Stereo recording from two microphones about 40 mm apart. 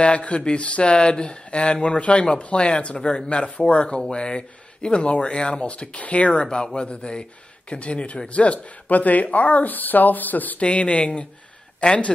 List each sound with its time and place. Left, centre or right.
0.0 s speech: left
3.0 s speech: centre
3.3 s speech: left
6.4 s speech: left
10.6 s speech: left